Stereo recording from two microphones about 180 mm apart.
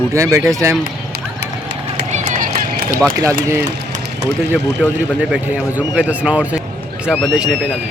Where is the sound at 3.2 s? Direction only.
15° right (ahead or behind).